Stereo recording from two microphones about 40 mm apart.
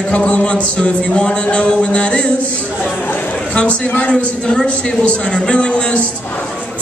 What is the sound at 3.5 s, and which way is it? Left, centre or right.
A man's voice, left.